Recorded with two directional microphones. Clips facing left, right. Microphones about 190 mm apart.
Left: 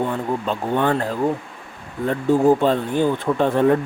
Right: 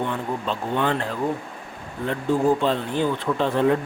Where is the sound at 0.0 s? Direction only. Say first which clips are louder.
Left 4 dB; 45° left (ahead or behind).